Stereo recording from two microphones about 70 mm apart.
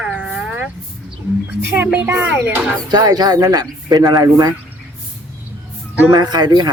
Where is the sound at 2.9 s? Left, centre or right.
Right.